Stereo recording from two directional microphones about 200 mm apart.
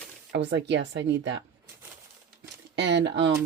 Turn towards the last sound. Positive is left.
turn(degrees=-60)  # may be behind; listen again after turning